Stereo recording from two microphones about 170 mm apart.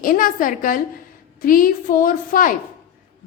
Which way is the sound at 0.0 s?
55° left (ahead or behind).